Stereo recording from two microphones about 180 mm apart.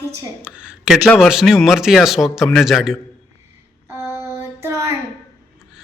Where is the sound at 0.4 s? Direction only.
5° right (ahead or behind).